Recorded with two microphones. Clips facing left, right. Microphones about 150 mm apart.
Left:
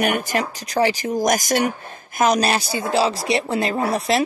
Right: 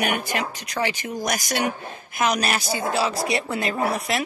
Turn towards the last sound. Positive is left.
turn(degrees=30)  # may be behind; listen again after turning